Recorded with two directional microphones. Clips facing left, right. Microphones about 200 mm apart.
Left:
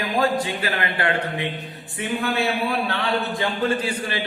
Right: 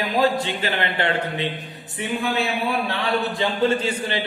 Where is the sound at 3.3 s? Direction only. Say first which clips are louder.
Right 2 dB; 25° right (ahead or behind).